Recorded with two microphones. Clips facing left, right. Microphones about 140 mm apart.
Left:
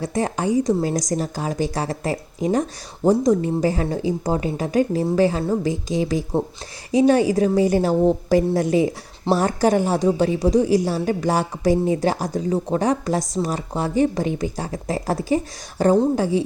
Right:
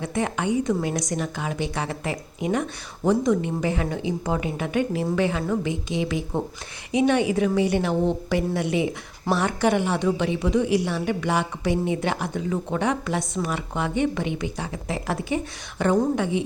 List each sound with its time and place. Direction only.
0.0 s a woman's voice: 35° left (ahead or behind)